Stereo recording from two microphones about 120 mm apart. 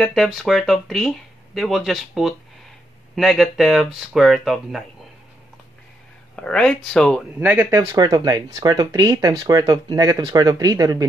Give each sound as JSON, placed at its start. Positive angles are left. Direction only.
{"t": 0.0, "sound": "speech", "side_deg": 0}
{"t": 6.3, "sound": "speech", "side_deg": 5}
{"t": 7.3, "sound": "speech", "side_deg": -15}
{"t": 7.9, "sound": "speech", "side_deg": -35}